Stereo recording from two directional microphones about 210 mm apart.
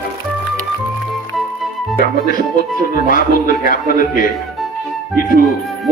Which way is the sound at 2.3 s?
40° left (ahead or behind).